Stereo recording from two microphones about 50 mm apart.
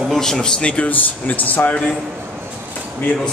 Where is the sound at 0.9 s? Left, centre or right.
Left.